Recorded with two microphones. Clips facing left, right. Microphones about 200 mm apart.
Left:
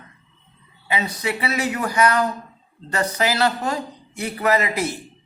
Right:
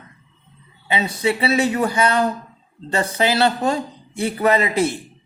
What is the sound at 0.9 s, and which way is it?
Speech, 30° right (ahead or behind).